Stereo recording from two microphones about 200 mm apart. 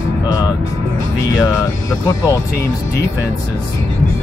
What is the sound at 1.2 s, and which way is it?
Speech, 15° left (ahead or behind).